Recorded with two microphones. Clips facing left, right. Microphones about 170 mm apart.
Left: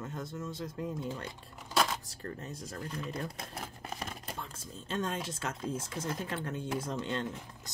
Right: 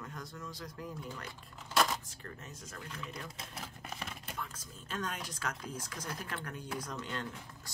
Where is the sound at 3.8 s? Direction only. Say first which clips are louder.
Left 3 dB; 35° left (ahead or behind); by 7.7 s 20° left (ahead or behind).